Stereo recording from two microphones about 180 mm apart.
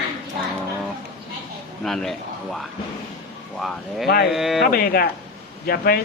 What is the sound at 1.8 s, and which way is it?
Speech, centre (ahead or behind).